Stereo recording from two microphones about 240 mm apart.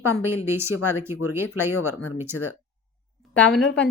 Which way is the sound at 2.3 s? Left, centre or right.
Left.